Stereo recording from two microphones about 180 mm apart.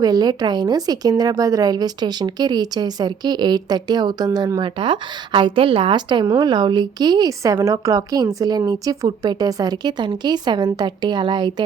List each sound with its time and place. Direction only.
0.0 s speech: 20° right (ahead or behind)